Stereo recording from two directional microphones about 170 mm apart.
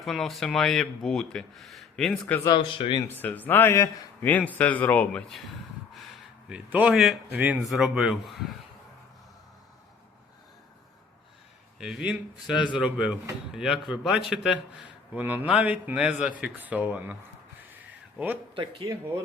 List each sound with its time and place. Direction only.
0.0 s speech: centre (ahead or behind)
2.2 s speech: 15° left (ahead or behind)
3.1 s a man's voice: 10° left (ahead or behind)
6.5 s a man's voice: 10° right (ahead or behind)
11.8 s speech: 5° right (ahead or behind)
12.5 s speech: 25° left (ahead or behind)
12.8 s a man's voice: 5° right (ahead or behind)
18.5 s speech: 30° right (ahead or behind)